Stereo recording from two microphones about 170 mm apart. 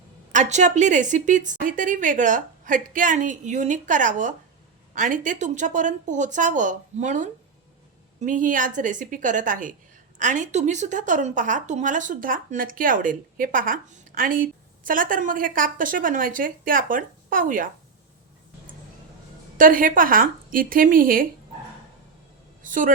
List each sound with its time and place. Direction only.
0.3 s speech: 45° right (ahead or behind)
19.5 s a woman's voice: 55° right (ahead or behind)
22.6 s a sound: 50° right (ahead or behind)